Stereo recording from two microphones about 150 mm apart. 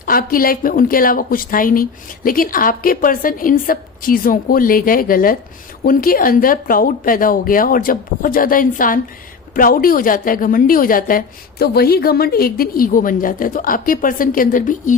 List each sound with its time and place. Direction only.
0.0 s speech: 75° left (ahead or behind)
11.6 s speech: 90° left; by 14.9 s 60° left (ahead or behind)